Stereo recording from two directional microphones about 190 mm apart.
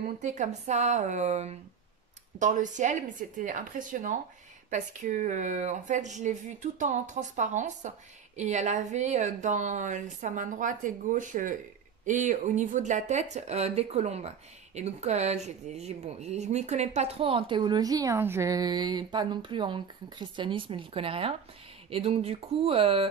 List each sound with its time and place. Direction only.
0.2 s a woman's voice: 40° right (ahead or behind)